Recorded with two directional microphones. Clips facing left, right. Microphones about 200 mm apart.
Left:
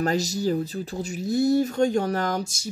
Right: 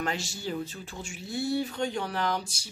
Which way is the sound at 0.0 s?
40° left (ahead or behind).